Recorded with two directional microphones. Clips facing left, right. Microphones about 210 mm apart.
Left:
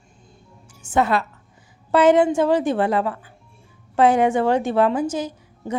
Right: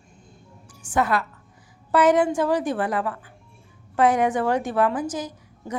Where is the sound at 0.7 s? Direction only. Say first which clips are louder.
Left 3 dB; 25° left (ahead or behind).